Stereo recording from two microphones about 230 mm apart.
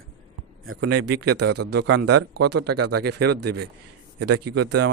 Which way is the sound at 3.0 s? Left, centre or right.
Right.